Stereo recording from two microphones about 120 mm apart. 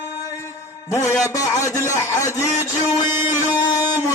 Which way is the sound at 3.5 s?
35° left (ahead or behind).